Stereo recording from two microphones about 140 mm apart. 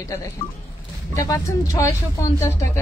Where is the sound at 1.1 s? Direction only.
25° left (ahead or behind).